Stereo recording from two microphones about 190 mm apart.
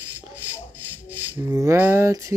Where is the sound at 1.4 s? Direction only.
20° right (ahead or behind).